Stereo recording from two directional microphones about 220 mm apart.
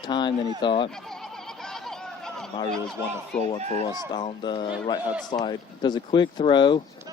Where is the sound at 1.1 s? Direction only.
5° left (ahead or behind).